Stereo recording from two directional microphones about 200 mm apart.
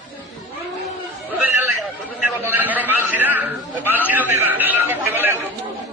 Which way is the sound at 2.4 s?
10° right (ahead or behind).